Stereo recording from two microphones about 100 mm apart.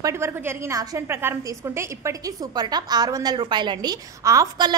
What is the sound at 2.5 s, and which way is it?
A woman's voice, 45° right (ahead or behind).